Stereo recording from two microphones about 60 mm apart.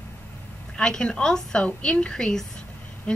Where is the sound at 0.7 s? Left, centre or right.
Centre.